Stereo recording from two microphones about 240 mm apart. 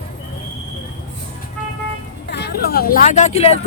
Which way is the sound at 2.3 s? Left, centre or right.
Left.